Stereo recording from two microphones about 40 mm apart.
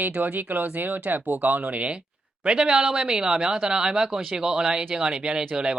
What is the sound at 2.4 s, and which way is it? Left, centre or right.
Speech, right.